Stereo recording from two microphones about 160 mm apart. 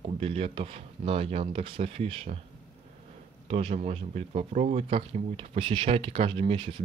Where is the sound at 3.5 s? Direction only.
40° right (ahead or behind).